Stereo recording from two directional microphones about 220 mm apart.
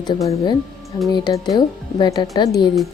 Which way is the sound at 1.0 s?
15° left (ahead or behind).